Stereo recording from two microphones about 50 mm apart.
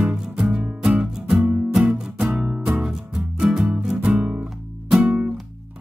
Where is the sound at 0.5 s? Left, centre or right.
Right.